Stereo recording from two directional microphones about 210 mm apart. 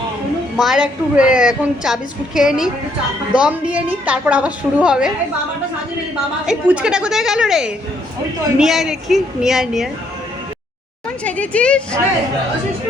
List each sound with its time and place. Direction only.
0.5 s a woman's voice: centre (ahead or behind)
6.4 s a woman's voice: 5° right (ahead or behind)
11.2 s a woman's voice: 5° left (ahead or behind)